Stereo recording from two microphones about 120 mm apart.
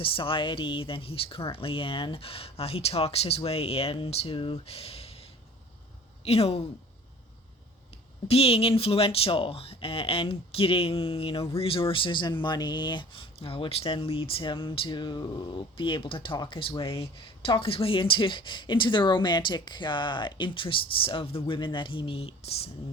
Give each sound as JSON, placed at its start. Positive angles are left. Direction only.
{"t": 0.0, "sound": "speech", "side_deg": 45}
{"t": 6.2, "sound": "speech", "side_deg": 55}
{"t": 8.3, "sound": "speech", "side_deg": 55}